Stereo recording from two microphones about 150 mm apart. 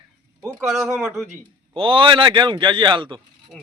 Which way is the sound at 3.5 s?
Centre (ahead or behind).